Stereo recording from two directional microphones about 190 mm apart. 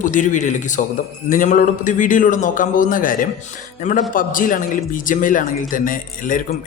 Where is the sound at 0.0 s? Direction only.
40° left (ahead or behind).